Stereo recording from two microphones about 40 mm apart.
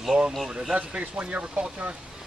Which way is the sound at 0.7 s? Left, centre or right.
Right.